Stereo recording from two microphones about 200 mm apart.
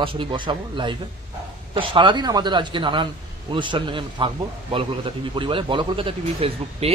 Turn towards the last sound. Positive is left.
turn(degrees=-30)  # may be behind; listen again after turning